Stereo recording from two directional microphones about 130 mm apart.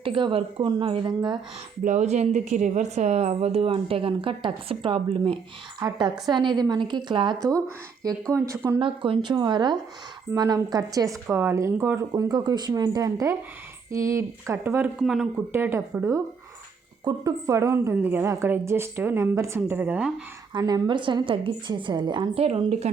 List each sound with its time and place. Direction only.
0.0 s a woman's voice: 40° right (ahead or behind)
1.8 s a woman's voice: 70° right (ahead or behind); by 5.4 s 40° right (ahead or behind)
5.8 s a woman's voice: 25° right (ahead or behind)
8.0 s speech: 25° right (ahead or behind)
8.8 s a woman's voice: 40° right (ahead or behind); by 14.8 s 20° right (ahead or behind)
14.9 s speech: 5° right (ahead or behind)
15.5 s a woman's voice: 15° right (ahead or behind)
20.5 s a woman's voice: 30° right (ahead or behind)
22.4 s a woman's voice: 55° right (ahead or behind)